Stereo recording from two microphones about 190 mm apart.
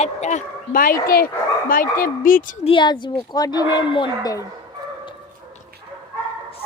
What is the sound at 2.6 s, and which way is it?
Speech, 25° left (ahead or behind).